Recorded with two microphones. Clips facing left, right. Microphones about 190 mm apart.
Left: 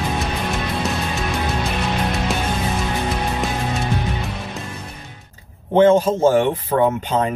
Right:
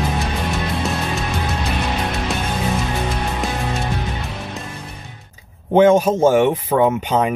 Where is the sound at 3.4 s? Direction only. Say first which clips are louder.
Even; centre (ahead or behind).